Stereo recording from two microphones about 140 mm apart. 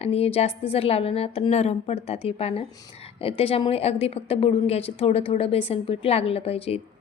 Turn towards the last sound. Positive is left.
turn(degrees=45)  # may be behind; listen again after turning